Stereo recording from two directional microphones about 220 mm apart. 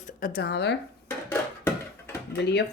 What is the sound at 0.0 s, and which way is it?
Speech, 40° left (ahead or behind).